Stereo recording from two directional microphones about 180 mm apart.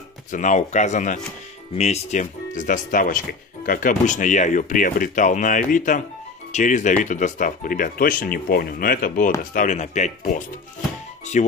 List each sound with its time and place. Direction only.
0.3 s speech: 45° left (ahead or behind)